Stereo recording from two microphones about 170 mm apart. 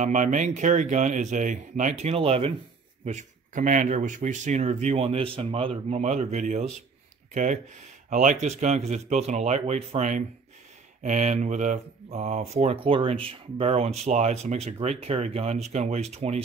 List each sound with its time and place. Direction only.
0.0 s speech: 45° right (ahead or behind)
8.1 s speech: 45° right (ahead or behind)